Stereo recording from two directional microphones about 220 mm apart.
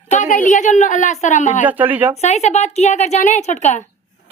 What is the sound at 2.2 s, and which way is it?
A woman's voice, 30° left (ahead or behind).